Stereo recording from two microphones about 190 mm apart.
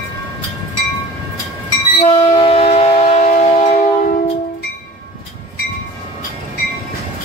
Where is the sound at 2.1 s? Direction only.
30° left (ahead or behind).